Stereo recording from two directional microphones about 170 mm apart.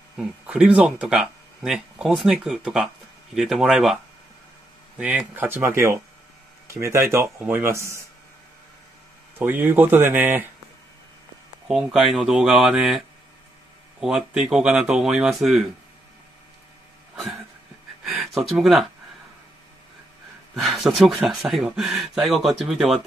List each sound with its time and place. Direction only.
0.2 s speech: 5° right (ahead or behind)
9.4 s speech: 10° right (ahead or behind)
11.6 s speech: 5° right (ahead or behind)
17.1 s a sound: centre (ahead or behind)
18.0 s speech: centre (ahead or behind)
20.6 s speech: centre (ahead or behind)